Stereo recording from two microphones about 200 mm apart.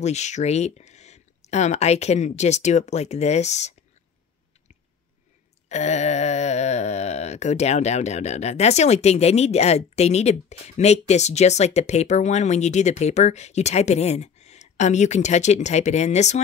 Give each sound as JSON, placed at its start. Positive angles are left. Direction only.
{"t": 0.0, "sound": "speech", "side_deg": 35}
{"t": 5.7, "sound": "speech", "side_deg": 35}